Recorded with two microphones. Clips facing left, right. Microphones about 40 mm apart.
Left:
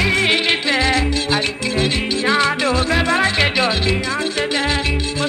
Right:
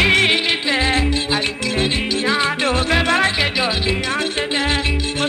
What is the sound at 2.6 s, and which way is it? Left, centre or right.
Music, right.